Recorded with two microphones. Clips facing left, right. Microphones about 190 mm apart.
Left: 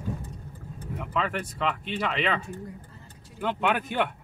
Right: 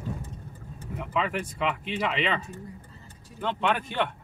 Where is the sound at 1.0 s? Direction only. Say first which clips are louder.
Right 1 dB; 5° right (ahead or behind).